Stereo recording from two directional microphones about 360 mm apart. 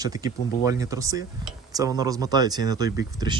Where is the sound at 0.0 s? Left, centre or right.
Centre.